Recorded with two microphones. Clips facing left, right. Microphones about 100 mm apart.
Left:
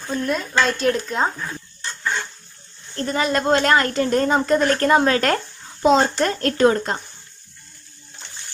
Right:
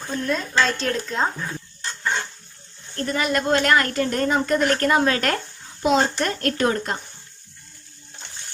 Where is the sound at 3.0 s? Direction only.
30° left (ahead or behind).